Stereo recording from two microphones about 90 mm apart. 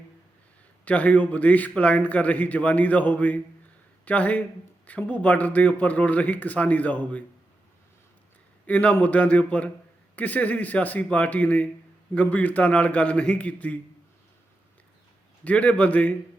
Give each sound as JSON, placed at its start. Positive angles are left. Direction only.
{"t": 0.9, "sound": "a man's voice", "side_deg": 15}
{"t": 8.6, "sound": "a man's voice", "side_deg": 20}
{"t": 15.4, "sound": "a man's voice", "side_deg": 15}